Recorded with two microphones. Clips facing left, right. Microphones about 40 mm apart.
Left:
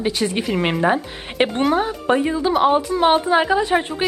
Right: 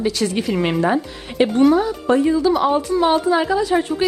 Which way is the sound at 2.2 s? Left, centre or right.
Left.